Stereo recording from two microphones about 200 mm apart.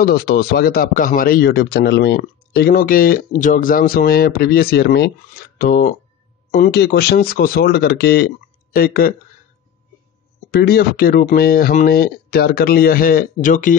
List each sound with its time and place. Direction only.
0.0 s a man's voice: 50° left (ahead or behind)
10.5 s a man's voice: 50° left (ahead or behind)